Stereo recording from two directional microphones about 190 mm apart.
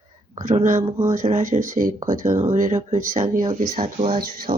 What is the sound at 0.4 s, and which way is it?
Speech, 45° right (ahead or behind).